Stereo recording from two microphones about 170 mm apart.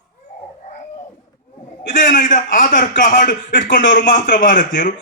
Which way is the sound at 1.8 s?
50° left (ahead or behind).